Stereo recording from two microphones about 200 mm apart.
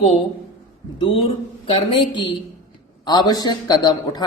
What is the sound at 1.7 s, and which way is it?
Speech, 25° left (ahead or behind).